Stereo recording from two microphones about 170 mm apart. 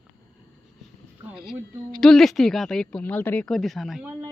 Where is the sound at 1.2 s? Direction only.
5° right (ahead or behind).